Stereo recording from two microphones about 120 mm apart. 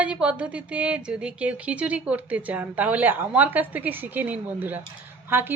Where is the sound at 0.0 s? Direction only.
10° right (ahead or behind).